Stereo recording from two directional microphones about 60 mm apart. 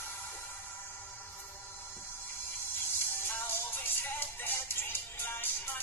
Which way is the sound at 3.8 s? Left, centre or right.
Left.